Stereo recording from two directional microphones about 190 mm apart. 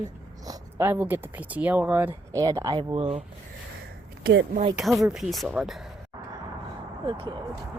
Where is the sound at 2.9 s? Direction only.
30° right (ahead or behind).